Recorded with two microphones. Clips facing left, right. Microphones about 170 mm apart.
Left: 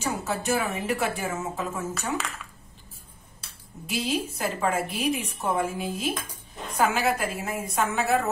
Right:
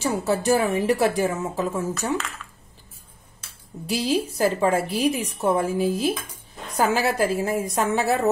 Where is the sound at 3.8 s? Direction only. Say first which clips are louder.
Right 5 dB; 35° right (ahead or behind).